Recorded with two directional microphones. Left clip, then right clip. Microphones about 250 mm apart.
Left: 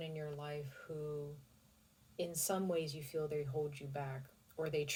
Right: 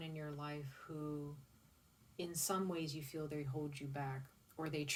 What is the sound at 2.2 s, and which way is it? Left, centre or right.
Speech, centre.